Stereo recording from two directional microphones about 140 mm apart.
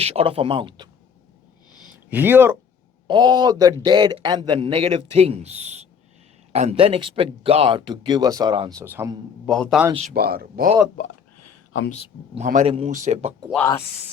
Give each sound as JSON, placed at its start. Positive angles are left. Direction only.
{"t": 0.0, "sound": "a man's voice", "side_deg": -45}
{"t": 2.0, "sound": "speech", "side_deg": -15}
{"t": 3.1, "sound": "a man's voice", "side_deg": -30}
{"t": 8.7, "sound": "speech", "side_deg": -20}
{"t": 9.5, "sound": "a man's voice", "side_deg": 0}
{"t": 9.9, "sound": "speech", "side_deg": -55}
{"t": 10.2, "sound": "speech", "side_deg": -90}
{"t": 12.4, "sound": "speech", "side_deg": -60}
{"t": 12.6, "sound": "speech", "side_deg": -40}
{"t": 12.9, "sound": "speech", "side_deg": -60}